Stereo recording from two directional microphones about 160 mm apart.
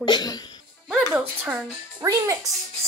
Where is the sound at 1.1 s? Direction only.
5° right (ahead or behind).